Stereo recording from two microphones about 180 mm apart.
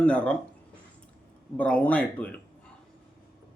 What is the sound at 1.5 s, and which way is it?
Speech, 5° left (ahead or behind).